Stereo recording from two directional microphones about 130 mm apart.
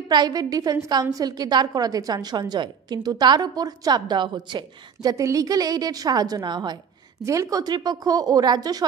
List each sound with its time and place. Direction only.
0.1 s a woman's voice: 30° right (ahead or behind)
5.1 s a woman's voice: 25° right (ahead or behind)